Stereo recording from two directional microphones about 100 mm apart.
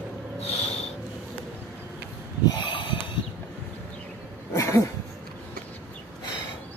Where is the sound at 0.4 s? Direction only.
90° left.